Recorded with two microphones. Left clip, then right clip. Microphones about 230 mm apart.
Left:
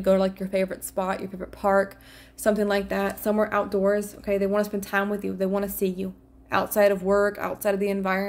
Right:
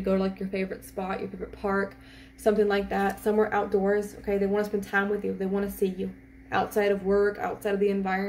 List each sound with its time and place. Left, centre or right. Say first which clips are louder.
0.0 s a woman's voice: left 6 dB; left